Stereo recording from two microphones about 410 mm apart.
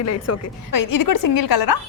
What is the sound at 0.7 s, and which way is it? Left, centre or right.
A woman's voice, left.